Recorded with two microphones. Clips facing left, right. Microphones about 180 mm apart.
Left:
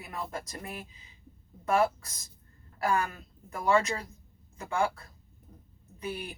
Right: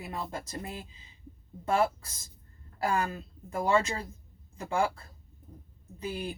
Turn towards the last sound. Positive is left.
turn(degrees=-30)  # may be behind; listen again after turning